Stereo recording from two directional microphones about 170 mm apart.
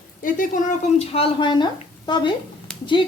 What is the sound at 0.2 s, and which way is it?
Speech, 50° left (ahead or behind).